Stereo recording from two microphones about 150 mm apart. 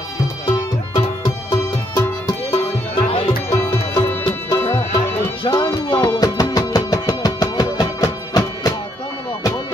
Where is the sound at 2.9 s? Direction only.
35° left (ahead or behind).